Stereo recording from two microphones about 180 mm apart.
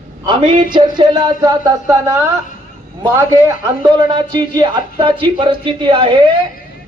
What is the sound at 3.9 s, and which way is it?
Speech, 25° right (ahead or behind).